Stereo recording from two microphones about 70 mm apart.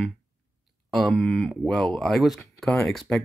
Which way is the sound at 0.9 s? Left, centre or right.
Centre.